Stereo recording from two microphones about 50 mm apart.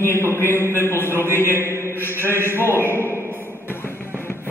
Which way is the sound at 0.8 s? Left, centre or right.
Left.